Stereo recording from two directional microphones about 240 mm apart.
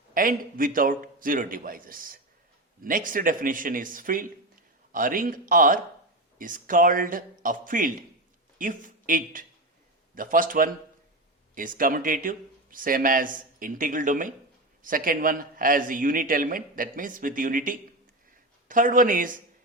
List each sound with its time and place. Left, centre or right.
0.1 s a man's voice: right